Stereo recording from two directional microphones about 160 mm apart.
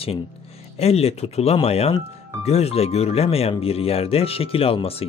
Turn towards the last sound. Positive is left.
turn(degrees=35)  # may be behind; listen again after turning